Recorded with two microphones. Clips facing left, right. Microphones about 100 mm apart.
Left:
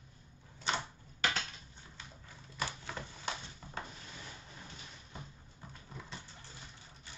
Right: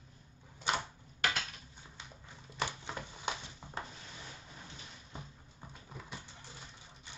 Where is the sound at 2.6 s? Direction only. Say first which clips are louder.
Right 2 dB; 20° right (ahead or behind).